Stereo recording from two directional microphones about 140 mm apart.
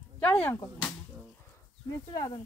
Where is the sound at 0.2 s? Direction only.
10° left (ahead or behind).